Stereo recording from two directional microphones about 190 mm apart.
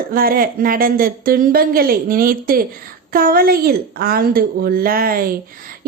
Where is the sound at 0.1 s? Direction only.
50° right (ahead or behind).